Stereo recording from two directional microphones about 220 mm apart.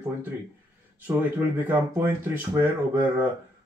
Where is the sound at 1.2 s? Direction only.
10° right (ahead or behind).